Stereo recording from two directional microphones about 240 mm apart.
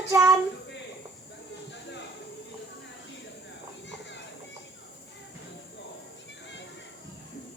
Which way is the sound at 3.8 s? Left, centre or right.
Left.